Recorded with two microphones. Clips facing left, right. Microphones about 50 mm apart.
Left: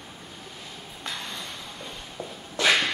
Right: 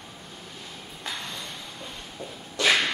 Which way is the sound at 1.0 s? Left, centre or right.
Centre.